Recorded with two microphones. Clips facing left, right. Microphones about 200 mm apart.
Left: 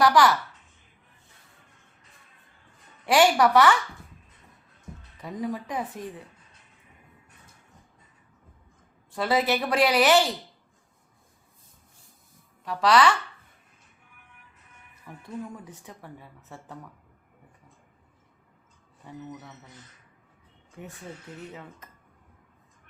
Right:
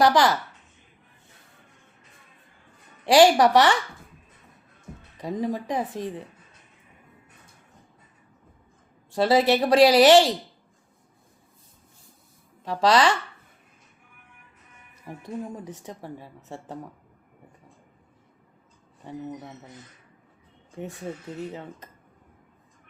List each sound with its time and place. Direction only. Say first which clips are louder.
0.0 s speech: right 1 dB; 20° right (ahead or behind)
3.1 s speech: right 4 dB; 35° right (ahead or behind)
5.2 s speech: right 4 dB; 30° right (ahead or behind)
9.1 s speech: right 5 dB; 30° right (ahead or behind)
12.6 s speech: right 1 dB; 25° right (ahead or behind)
15.1 s speech: right 3 dB; 30° right (ahead or behind)
19.0 s speech: right 5 dB; 25° right (ahead or behind)
21.5 s speech: right 5 dB; 25° right (ahead or behind)